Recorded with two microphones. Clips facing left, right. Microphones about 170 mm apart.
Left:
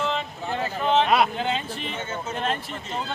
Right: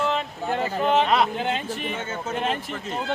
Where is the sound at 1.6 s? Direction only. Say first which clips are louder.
Right 3 dB; 50° right (ahead or behind).